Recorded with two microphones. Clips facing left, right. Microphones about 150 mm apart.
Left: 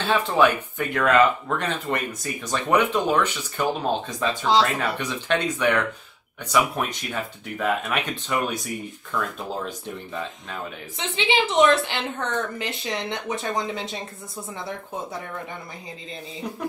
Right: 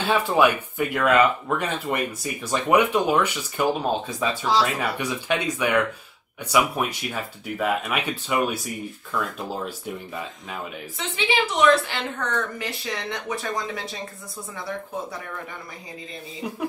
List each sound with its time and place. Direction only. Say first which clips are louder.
0.0 s speech: even; 10° right (ahead or behind)
11.2 s speech: left 1 dB; 25° left (ahead or behind)